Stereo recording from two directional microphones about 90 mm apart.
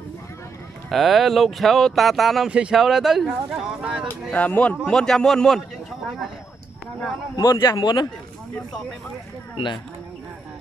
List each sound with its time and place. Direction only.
0.8 s speech: centre (ahead or behind)
2.5 s speech: 10° right (ahead or behind)
4.3 s speech: 15° left (ahead or behind)
4.8 s speech: 5° left (ahead or behind)
7.3 s a man's voice: 55° left (ahead or behind)